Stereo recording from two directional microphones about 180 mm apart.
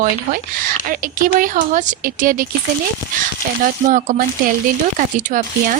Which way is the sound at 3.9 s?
50° right (ahead or behind).